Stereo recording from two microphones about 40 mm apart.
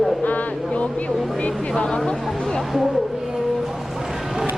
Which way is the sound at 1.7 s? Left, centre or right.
Left.